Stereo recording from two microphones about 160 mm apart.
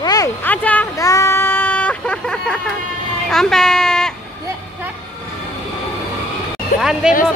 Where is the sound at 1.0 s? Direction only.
20° left (ahead or behind); by 2.6 s 5° left (ahead or behind).